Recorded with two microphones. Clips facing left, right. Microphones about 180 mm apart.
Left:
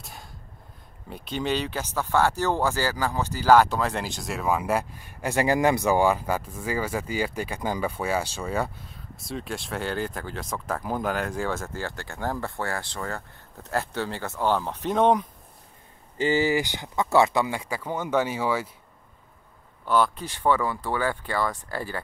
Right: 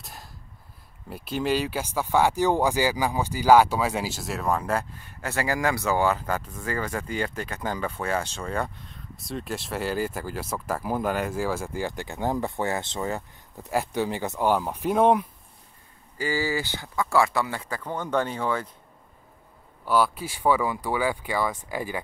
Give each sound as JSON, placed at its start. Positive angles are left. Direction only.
{"t": 0.0, "sound": "a sound", "side_deg": 0}
{"t": 1.1, "sound": "speech", "side_deg": -5}
{"t": 16.2, "sound": "speech", "side_deg": 20}
{"t": 19.8, "sound": "speech", "side_deg": -5}